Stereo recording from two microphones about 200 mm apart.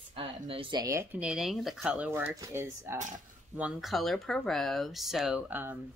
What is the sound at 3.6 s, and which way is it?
Speech, 5° right (ahead or behind).